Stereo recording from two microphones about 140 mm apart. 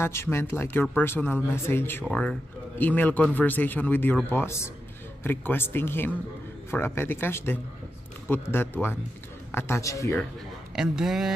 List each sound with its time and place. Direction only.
0.0 s a man's voice: 20° left (ahead or behind)
10.8 s speech: 5° right (ahead or behind)